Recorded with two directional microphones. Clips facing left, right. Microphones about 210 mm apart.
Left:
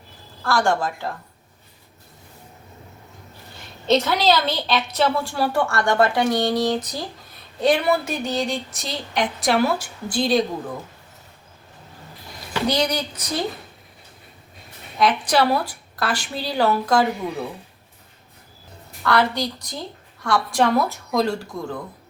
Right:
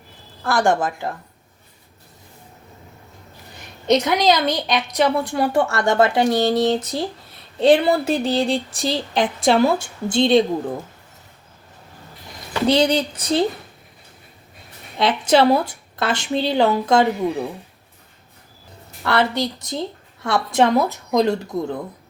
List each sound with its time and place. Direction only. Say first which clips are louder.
0.4 s a woman's voice: right 2 dB; 20° right (ahead or behind)
3.8 s a woman's voice: right 2 dB; 15° right (ahead or behind)
12.6 s a woman's voice: right 6 dB; 25° right (ahead or behind)
14.9 s a woman's voice: right 3 dB; 25° right (ahead or behind)
19.0 s a woman's voice: right 1 dB; 25° right (ahead or behind)